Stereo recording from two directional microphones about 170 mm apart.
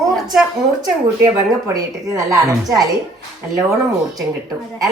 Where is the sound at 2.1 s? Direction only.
20° right (ahead or behind).